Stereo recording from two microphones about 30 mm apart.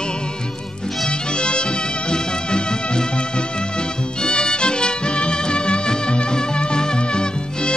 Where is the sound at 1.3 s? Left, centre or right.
Left.